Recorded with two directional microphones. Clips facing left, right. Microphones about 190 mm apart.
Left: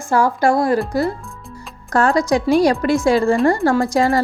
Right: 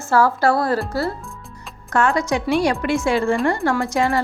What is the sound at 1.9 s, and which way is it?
A woman's voice, 35° left (ahead or behind).